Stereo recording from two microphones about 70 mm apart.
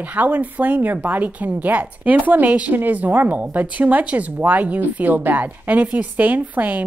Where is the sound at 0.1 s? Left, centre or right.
Right.